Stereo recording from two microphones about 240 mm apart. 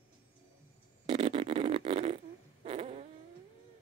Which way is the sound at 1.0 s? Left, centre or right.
Right.